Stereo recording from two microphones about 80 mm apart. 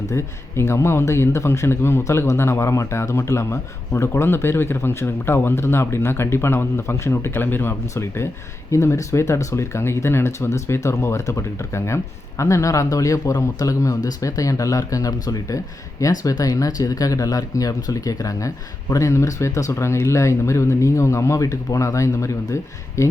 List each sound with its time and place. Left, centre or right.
0.1 s a man's voice: left